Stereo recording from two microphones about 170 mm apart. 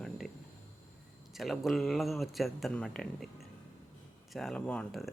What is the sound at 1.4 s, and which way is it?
Speech, centre (ahead or behind).